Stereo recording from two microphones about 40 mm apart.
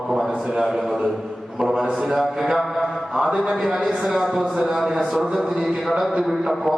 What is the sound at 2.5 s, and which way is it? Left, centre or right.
Mantra, centre.